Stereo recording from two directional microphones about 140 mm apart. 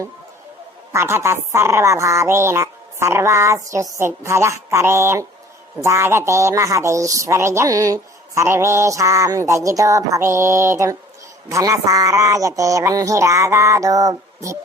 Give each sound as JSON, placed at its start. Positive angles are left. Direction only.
{"t": 0.9, "sound": "speech", "side_deg": -20}